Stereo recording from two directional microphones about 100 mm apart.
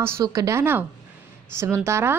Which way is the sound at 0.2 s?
35° right (ahead or behind).